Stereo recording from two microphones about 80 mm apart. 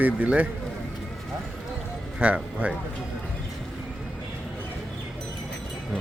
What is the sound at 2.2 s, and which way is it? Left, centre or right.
Speech, centre.